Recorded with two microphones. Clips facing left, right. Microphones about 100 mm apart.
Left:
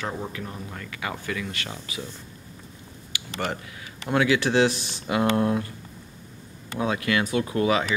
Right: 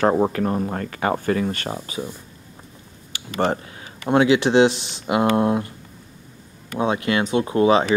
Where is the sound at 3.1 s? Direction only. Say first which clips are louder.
Right 1 dB; 35° right (ahead or behind).